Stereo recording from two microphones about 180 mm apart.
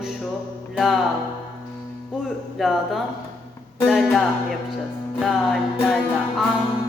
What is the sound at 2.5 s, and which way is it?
Music, centre (ahead or behind).